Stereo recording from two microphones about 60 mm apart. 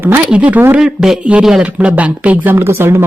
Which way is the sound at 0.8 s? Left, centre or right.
Centre.